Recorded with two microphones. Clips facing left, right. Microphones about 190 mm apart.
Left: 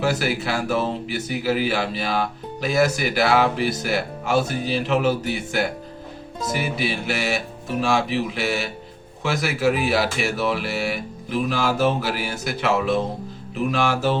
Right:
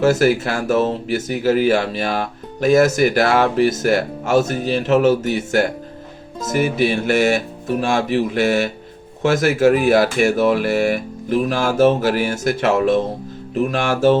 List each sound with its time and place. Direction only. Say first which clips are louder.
0.0 s speech: right 8 dB; 45° right (ahead or behind)